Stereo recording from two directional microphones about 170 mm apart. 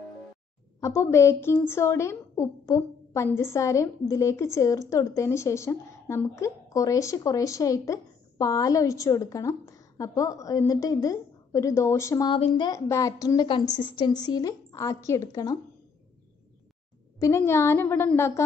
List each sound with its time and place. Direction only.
0.7 s a woman's voice: 15° left (ahead or behind)
12.3 s speech: 30° left (ahead or behind)
17.2 s a woman's voice: 15° left (ahead or behind)